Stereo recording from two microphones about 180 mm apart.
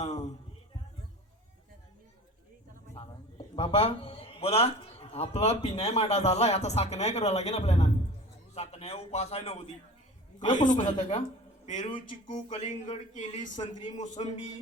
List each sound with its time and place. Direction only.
0.0 s music: 40° left (ahead or behind)
2.9 s a man's voice: 30° left (ahead or behind)
10.6 s a woman's voice: 45° left (ahead or behind)